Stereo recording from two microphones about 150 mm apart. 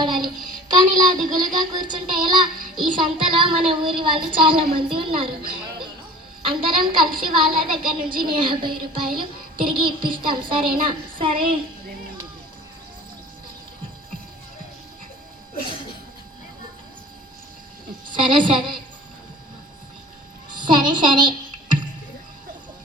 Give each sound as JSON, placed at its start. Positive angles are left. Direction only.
{"t": 0.0, "sound": "music", "side_deg": -30}
{"t": 0.7, "sound": "speech", "side_deg": -30}
{"t": 1.5, "sound": "child singing", "side_deg": -30}
{"t": 18.1, "sound": "a woman's voice", "side_deg": -30}
{"t": 20.6, "sound": "a sound", "side_deg": -30}